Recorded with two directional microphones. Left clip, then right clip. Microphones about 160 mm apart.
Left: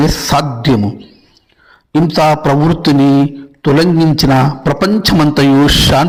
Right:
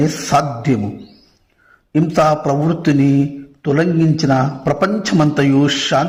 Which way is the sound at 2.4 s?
25° left (ahead or behind).